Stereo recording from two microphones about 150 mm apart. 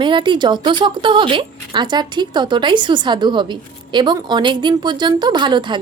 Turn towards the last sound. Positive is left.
turn(degrees=-30)  # may be behind; listen again after turning